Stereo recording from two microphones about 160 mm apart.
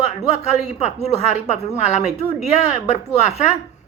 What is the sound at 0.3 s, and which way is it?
A man's voice, 45° left (ahead or behind).